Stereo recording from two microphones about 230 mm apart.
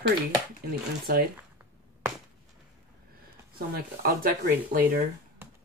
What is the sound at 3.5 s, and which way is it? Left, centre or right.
Speech, right.